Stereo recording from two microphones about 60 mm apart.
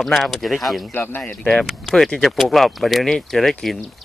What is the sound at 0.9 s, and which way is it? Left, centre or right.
Speech, left.